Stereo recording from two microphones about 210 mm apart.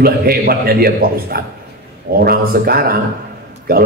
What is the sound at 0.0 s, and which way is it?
A man's voice, 45° right (ahead or behind).